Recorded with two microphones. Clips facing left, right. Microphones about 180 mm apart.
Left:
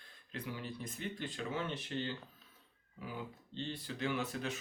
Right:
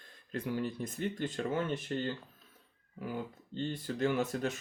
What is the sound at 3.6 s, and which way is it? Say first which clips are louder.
Speech: right 7 dB; 45° right (ahead or behind).